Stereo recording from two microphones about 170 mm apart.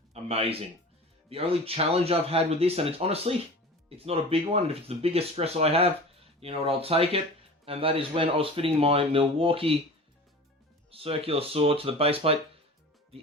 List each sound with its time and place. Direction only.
0.1 s a sound: 35° right (ahead or behind)
1.3 s speech: 35° right (ahead or behind)
10.9 s speech: 35° right (ahead or behind)